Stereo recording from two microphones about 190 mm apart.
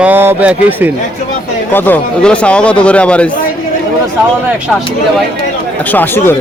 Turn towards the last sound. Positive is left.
turn(degrees=10)  # may be behind; listen again after turning